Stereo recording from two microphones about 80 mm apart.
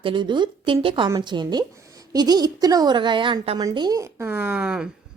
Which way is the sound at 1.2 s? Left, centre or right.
Right.